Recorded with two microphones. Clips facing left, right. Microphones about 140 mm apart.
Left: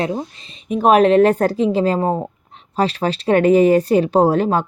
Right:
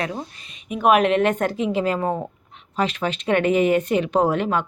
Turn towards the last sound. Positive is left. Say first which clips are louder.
# left 5 dB
turn(degrees=35)  # may be behind; listen again after turning